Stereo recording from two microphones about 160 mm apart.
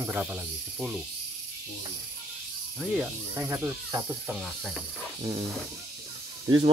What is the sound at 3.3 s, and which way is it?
Speech, 15° right (ahead or behind).